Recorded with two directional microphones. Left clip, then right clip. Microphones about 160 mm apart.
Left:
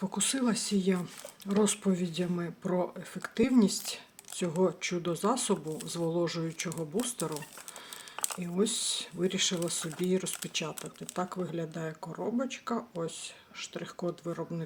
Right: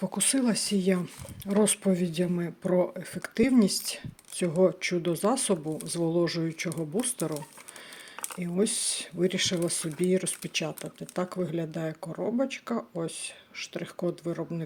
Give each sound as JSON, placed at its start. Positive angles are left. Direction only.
{"t": 0.0, "sound": "speech", "side_deg": -20}
{"t": 8.4, "sound": "speech", "side_deg": -25}